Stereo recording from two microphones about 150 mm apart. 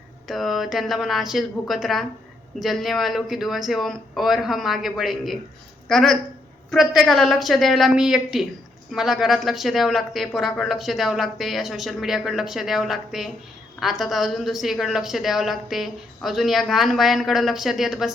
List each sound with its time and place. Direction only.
0.3 s a woman's voice: centre (ahead or behind)